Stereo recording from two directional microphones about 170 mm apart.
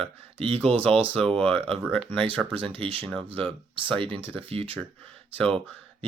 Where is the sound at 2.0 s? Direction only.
5° left (ahead or behind).